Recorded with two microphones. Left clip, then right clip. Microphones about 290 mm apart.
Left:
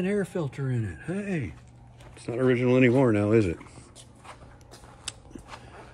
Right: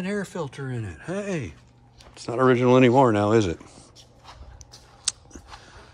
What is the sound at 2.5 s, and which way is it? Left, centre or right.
Speech, centre.